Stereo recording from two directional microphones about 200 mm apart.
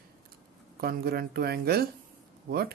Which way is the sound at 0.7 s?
50° right (ahead or behind).